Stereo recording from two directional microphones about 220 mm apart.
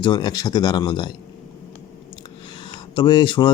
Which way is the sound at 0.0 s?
20° left (ahead or behind).